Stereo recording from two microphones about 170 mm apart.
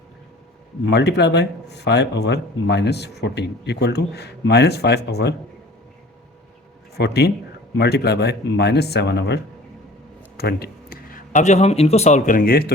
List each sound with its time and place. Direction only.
0.9 s speech: 90° left
6.9 s speech: 75° left (ahead or behind)
10.3 s speech: 70° left (ahead or behind)